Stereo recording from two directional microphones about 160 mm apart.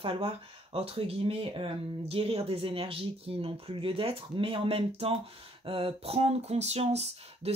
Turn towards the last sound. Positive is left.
turn(degrees=-40)  # may be behind; listen again after turning